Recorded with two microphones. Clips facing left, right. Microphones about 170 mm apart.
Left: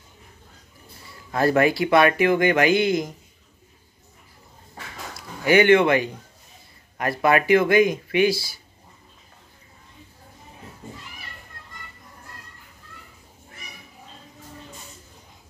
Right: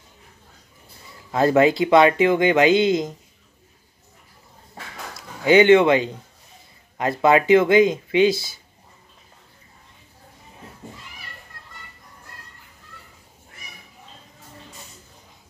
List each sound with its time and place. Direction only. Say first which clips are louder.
1.3 s speech: right 3 dB; 20° right (ahead or behind)
5.1 s speech: right 3 dB; 20° right (ahead or behind)